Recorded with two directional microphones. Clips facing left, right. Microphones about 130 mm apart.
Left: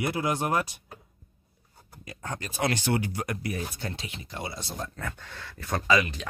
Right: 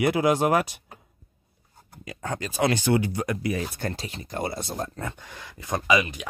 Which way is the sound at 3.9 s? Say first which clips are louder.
Right 5 dB; 40° right (ahead or behind).